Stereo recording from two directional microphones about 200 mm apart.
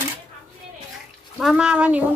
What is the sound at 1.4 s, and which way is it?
Speech, 5° right (ahead or behind).